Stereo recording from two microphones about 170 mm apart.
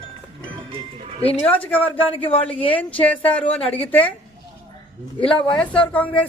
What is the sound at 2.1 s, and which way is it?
Speech, 30° left (ahead or behind).